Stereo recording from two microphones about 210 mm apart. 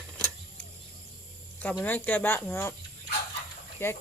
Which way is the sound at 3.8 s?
10° left (ahead or behind).